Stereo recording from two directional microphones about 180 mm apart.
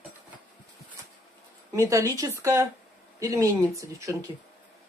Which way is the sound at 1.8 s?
15° right (ahead or behind).